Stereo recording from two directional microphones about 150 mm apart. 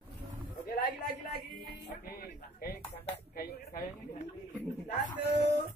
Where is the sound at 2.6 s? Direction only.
85° left.